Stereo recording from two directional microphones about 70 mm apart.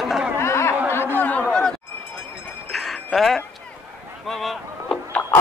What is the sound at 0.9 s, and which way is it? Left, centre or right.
Chatter, left.